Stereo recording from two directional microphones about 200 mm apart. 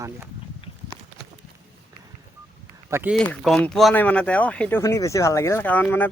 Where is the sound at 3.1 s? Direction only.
5° left (ahead or behind).